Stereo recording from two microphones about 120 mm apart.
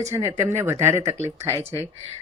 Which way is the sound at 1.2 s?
65° right (ahead or behind).